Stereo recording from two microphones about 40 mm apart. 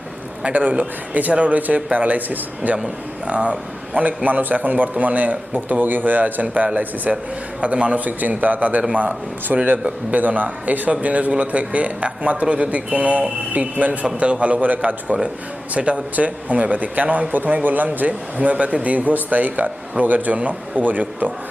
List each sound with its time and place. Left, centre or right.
0.4 s a man's voice: right
2.7 s a man's voice: right
4.0 s a man's voice: right
7.6 s a man's voice: right
7.9 s a man's voice: right